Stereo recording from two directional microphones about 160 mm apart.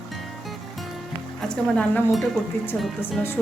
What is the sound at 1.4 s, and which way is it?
Speech, 5° left (ahead or behind).